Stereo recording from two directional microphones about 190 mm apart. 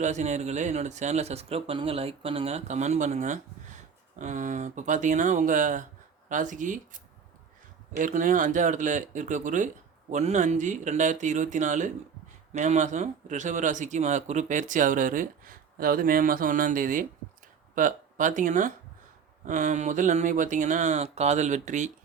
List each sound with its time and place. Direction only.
0.0 s speech: 40° right (ahead or behind)